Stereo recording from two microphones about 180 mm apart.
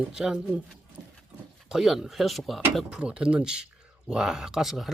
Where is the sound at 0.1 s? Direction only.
5° right (ahead or behind).